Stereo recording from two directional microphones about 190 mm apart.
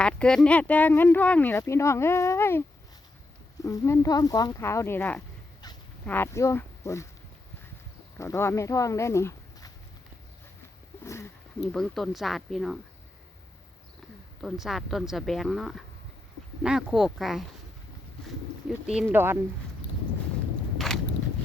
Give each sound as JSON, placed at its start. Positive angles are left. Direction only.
{"t": 0.0, "sound": "speech", "side_deg": 5}
{"t": 5.6, "sound": "dog", "side_deg": 20}
{"t": 6.1, "sound": "speech", "side_deg": 10}
{"t": 8.2, "sound": "speech", "side_deg": 15}
{"t": 11.0, "sound": "a sound", "side_deg": 15}
{"t": 11.7, "sound": "speech", "side_deg": 0}
{"t": 14.4, "sound": "speech", "side_deg": 0}
{"t": 18.9, "sound": "speech", "side_deg": -5}
{"t": 20.7, "sound": "a sound", "side_deg": 0}